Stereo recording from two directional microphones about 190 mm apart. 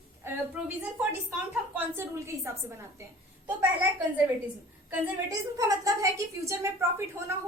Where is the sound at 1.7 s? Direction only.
15° right (ahead or behind).